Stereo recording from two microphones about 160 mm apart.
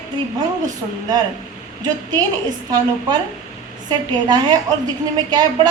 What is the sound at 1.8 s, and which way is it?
Speech, 25° right (ahead or behind).